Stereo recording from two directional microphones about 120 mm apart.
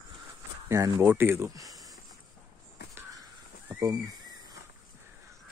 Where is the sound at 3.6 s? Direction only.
35° right (ahead or behind).